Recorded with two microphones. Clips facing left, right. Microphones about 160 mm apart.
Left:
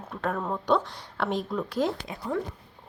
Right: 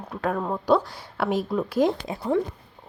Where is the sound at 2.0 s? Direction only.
30° right (ahead or behind).